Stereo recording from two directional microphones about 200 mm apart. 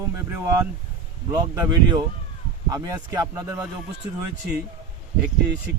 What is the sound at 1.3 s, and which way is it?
Speech, 20° right (ahead or behind).